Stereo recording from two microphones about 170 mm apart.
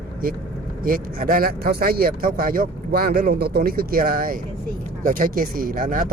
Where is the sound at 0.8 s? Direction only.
55° right (ahead or behind).